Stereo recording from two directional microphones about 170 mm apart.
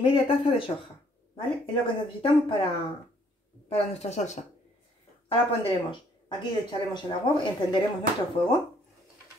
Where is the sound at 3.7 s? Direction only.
40° left (ahead or behind).